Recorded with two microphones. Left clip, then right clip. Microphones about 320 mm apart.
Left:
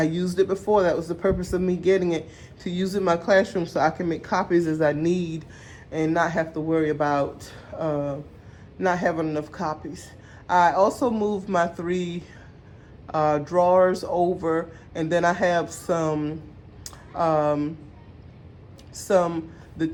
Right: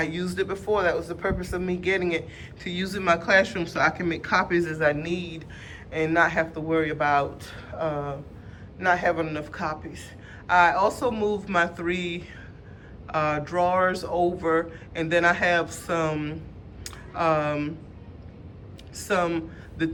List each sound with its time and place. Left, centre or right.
0.0 s a man's voice: centre
16.8 s a sound: centre
18.9 s a man's voice: centre